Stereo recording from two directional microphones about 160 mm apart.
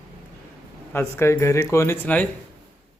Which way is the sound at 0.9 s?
15° left (ahead or behind).